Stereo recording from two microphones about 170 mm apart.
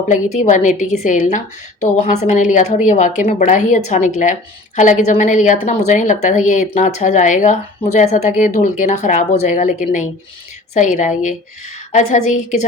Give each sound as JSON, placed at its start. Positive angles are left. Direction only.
{"t": 0.1, "sound": "a woman's voice", "side_deg": 45}